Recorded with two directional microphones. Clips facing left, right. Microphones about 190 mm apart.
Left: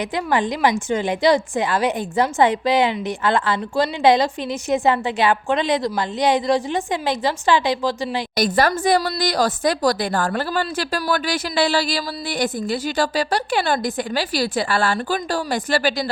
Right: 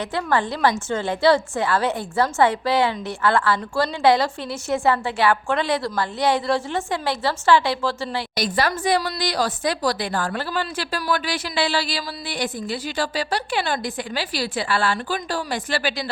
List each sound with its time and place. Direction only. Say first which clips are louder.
0.0 s a woman's voice: left 2 dB; 15° left (ahead or behind)
8.4 s a woman's voice: left 5 dB; 45° left (ahead or behind)